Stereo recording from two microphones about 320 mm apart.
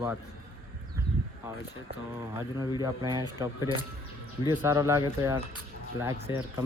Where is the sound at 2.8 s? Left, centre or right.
Centre.